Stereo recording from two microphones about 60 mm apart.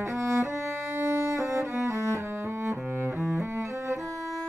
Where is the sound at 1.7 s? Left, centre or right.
Right.